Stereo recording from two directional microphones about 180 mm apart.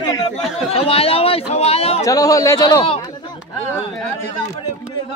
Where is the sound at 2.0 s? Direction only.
20° left (ahead or behind).